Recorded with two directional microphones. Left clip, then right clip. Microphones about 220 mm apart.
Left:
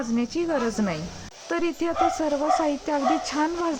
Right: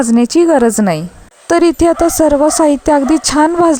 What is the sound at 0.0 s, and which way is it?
A woman's voice, 45° right (ahead or behind).